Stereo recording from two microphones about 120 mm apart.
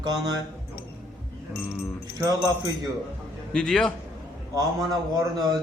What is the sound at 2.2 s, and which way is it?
Mantra, 30° right (ahead or behind).